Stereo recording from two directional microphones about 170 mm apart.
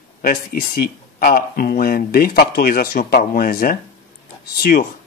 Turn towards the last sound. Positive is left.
turn(degrees=60)  # may be behind; listen again after turning